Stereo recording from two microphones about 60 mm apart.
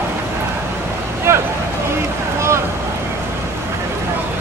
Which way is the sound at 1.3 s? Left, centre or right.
Right.